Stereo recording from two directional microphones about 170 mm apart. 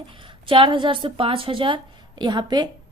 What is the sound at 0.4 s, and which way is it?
A woman's voice, 30° right (ahead or behind).